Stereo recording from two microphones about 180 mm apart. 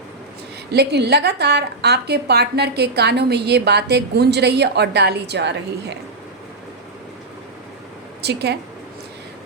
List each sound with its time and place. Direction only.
0.7 s a woman's voice: 65° right (ahead or behind)
8.2 s a woman's voice: 65° right (ahead or behind)